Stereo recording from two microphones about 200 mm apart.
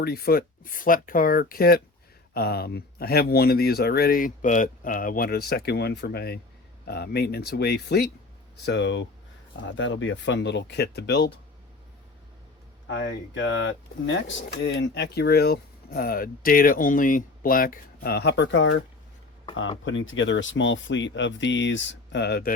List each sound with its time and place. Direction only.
0.0 s speech: 50° left (ahead or behind)
12.9 s speech: 70° left (ahead or behind)
19.8 s speech: 70° left (ahead or behind); by 22.5 s 50° left (ahead or behind)